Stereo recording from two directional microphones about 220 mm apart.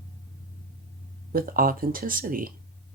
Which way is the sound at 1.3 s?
40° right (ahead or behind).